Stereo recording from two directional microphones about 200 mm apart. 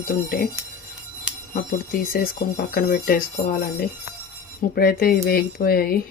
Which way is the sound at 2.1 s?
45° left (ahead or behind).